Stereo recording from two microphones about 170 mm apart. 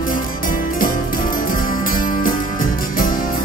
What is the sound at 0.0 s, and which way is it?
Music, 55° left (ahead or behind).